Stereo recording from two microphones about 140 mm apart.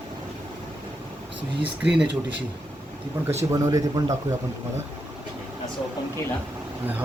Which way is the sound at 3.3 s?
25° right (ahead or behind).